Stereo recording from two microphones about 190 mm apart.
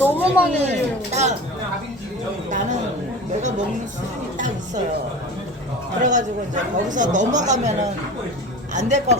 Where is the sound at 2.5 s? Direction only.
40° right (ahead or behind).